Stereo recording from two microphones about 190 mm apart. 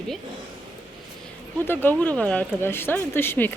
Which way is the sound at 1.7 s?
10° left (ahead or behind).